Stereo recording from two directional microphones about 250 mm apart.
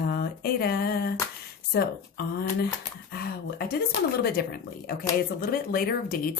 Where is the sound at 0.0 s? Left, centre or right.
Left.